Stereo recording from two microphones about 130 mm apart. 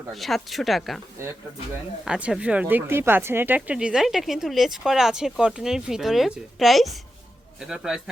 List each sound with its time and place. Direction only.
0.1 s speech: centre (ahead or behind)
1.2 s speech: 20° right (ahead or behind)
2.0 s speech: 10° right (ahead or behind)